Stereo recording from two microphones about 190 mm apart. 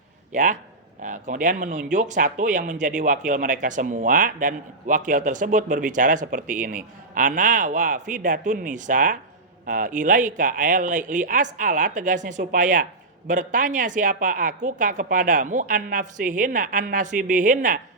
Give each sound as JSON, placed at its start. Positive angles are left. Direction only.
{"t": 0.3, "sound": "speech", "side_deg": -40}